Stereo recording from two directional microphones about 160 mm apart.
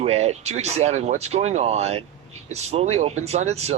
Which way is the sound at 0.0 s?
40° right (ahead or behind).